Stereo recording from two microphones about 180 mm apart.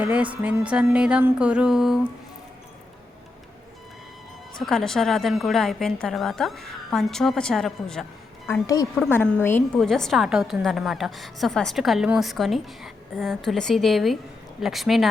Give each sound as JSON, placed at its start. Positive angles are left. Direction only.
{"t": 0.0, "sound": "music", "side_deg": -5}
{"t": 4.5, "sound": "a woman's voice", "side_deg": 5}
{"t": 8.6, "sound": "a woman's voice", "side_deg": 20}